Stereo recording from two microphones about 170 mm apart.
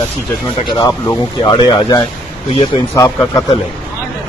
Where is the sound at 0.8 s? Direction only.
20° left (ahead or behind).